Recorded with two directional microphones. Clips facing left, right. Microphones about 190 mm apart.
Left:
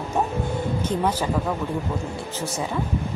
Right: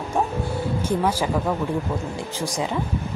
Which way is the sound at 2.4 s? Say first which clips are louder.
Right 3 dB; 15° right (ahead or behind).